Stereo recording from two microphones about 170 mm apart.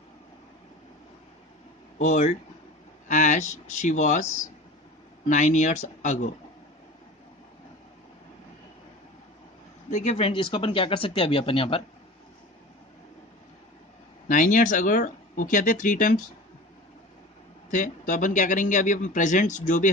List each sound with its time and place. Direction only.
2.0 s speech: 45° left (ahead or behind)
9.8 s speech: 45° left (ahead or behind)
14.2 s speech: 50° left (ahead or behind)
17.6 s speech: 50° left (ahead or behind)